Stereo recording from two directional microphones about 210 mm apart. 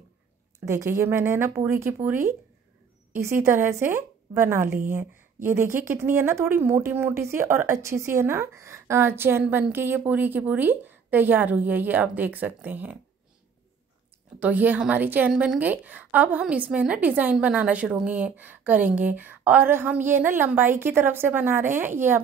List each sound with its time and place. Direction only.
0.7 s a woman's voice: 15° right (ahead or behind)
14.4 s a woman's voice: 10° right (ahead or behind)